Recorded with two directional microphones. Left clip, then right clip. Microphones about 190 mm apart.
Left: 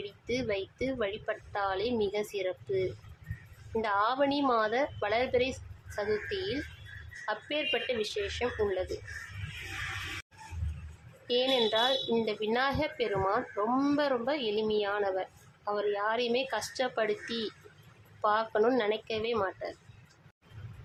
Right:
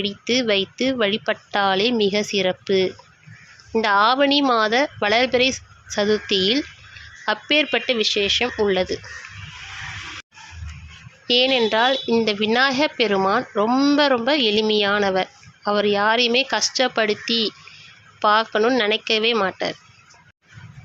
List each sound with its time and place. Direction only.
0.0 s a woman's voice: 25° right (ahead or behind)
11.3 s a woman's voice: 25° right (ahead or behind)
13.7 s speech: 15° right (ahead or behind)
13.9 s a woman's voice: 25° right (ahead or behind)